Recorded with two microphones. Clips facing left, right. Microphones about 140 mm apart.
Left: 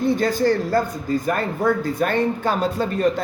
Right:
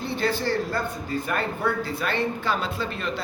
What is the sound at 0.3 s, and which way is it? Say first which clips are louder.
A man's voice: left 7 dB; 40° left (ahead or behind).